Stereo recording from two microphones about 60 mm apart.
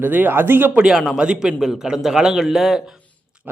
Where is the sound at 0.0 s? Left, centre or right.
Right.